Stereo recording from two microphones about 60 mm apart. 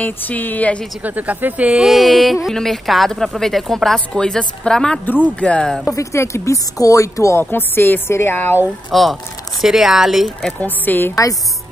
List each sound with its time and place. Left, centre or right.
0.0 s speech: left
1.0 s speech: right
1.9 s a woman's voice: centre
5.9 s speech: left
7.3 s speech: left
8.9 s speech: centre
10.6 s speech: left